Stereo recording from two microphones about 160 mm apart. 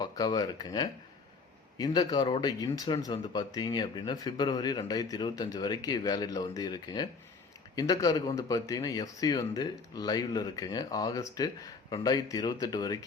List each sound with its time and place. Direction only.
0.0 s speech: 25° left (ahead or behind)